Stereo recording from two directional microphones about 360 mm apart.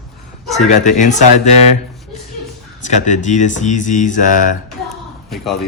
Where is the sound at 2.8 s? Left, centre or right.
Centre.